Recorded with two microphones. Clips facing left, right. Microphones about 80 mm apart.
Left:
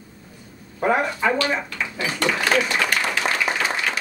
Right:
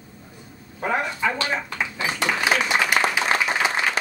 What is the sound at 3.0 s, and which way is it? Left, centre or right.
Applause, right.